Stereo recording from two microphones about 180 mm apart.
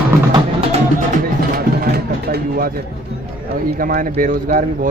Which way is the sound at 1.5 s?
60° right (ahead or behind).